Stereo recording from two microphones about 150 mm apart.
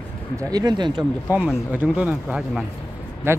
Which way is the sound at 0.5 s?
30° right (ahead or behind).